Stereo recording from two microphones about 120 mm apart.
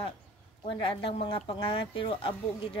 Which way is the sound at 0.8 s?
50° left (ahead or behind).